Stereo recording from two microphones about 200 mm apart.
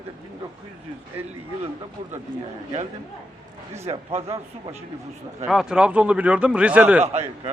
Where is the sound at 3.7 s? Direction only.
30° right (ahead or behind).